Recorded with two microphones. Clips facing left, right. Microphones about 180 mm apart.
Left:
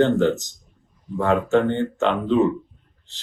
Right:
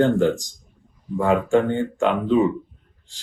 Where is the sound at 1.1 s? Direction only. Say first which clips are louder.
Right 1 dB; 5° right (ahead or behind).